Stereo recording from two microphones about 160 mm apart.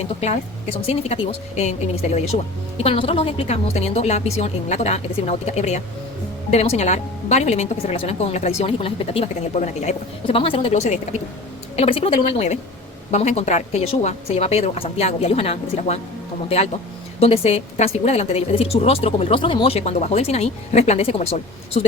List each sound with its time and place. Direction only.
0.2 s a woman's voice: 40° left (ahead or behind)
17.2 s a woman's voice: 40° left (ahead or behind)